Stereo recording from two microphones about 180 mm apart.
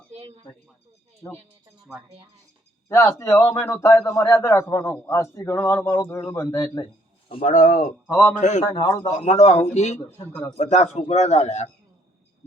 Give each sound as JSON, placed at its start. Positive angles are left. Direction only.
{"t": 0.1, "sound": "a sound", "side_deg": -35}
{"t": 2.9, "sound": "a man's voice", "side_deg": 15}
{"t": 7.4, "sound": "speech", "side_deg": 50}
{"t": 8.0, "sound": "a man's voice", "side_deg": 5}
{"t": 8.4, "sound": "speech", "side_deg": 40}
{"t": 8.6, "sound": "a man's voice", "side_deg": 20}
{"t": 9.1, "sound": "a man's voice", "side_deg": 35}
{"t": 10.0, "sound": "a man's voice", "side_deg": 10}
{"t": 10.6, "sound": "a man's voice", "side_deg": 40}